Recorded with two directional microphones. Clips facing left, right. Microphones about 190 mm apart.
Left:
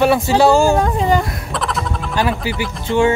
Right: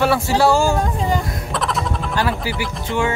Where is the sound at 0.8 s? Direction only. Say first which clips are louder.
Left 5 dB; 70° left (ahead or behind).